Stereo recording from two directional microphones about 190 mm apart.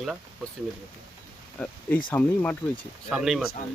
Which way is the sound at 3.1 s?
Centre (ahead or behind).